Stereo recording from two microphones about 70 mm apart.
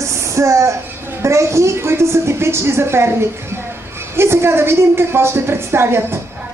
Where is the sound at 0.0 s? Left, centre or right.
Right.